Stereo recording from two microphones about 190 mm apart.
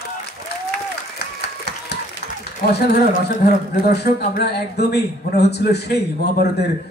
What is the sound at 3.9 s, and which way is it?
A man's voice, 60° left (ahead or behind).